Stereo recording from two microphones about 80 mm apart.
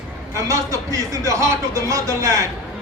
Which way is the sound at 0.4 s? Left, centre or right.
Right.